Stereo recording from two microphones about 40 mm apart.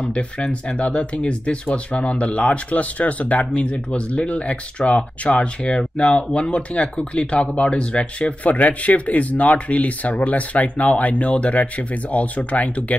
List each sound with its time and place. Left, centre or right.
0.1 s speech: left
8.5 s speech: left